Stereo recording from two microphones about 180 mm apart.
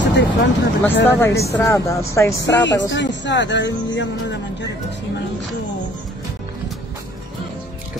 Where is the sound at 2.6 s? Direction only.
80° left.